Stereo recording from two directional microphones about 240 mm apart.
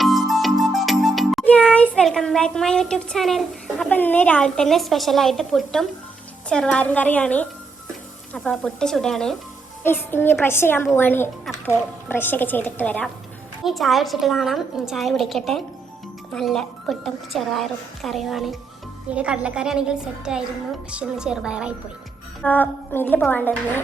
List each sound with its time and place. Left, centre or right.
0.0 s music: centre
6.5 s a woman's voice: centre
22.4 s a woman's voice: centre